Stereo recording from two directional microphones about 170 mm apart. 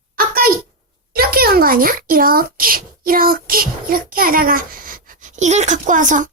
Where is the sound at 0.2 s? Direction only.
60° right (ahead or behind).